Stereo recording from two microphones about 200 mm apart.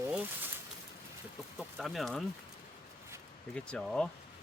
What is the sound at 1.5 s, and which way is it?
Bird, centre (ahead or behind).